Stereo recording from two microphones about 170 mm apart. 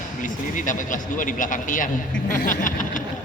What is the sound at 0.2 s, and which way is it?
A man's voice, 50° left (ahead or behind).